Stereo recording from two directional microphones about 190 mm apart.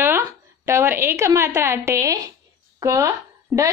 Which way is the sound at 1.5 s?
15° right (ahead or behind).